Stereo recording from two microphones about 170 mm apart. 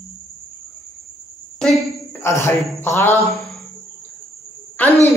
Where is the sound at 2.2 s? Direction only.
15° left (ahead or behind).